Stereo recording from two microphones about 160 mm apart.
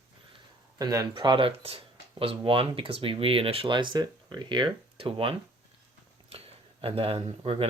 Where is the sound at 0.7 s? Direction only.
20° right (ahead or behind).